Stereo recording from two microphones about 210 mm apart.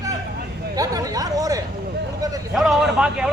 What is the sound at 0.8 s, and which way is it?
Speech, 15° right (ahead or behind).